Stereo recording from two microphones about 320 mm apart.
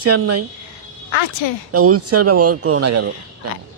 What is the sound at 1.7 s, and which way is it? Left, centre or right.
Speech, right.